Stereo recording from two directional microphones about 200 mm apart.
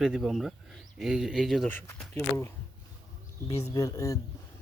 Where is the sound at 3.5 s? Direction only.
30° left (ahead or behind).